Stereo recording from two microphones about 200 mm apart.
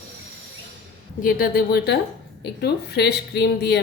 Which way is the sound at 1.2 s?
45° left (ahead or behind).